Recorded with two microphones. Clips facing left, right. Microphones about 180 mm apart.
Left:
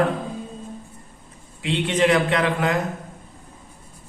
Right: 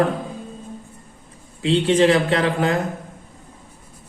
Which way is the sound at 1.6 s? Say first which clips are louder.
Right 5 dB; 30° right (ahead or behind).